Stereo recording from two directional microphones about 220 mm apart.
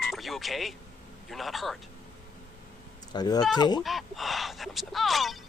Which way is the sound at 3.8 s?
Centre (ahead or behind).